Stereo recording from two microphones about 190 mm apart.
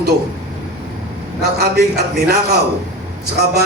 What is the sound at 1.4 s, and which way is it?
A man's voice, 55° right (ahead or behind).